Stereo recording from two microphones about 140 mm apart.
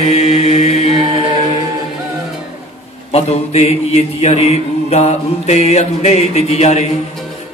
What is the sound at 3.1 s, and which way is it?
A man's voice, 50° left (ahead or behind).